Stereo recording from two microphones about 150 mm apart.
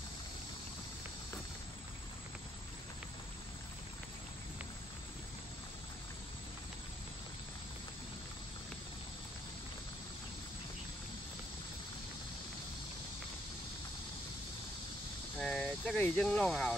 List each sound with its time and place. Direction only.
15.3 s vehicle: 5° left (ahead or behind)
16.0 s speech: 5° left (ahead or behind)